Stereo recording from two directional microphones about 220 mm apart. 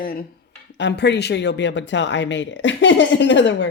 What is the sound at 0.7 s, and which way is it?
Speech, 50° left (ahead or behind).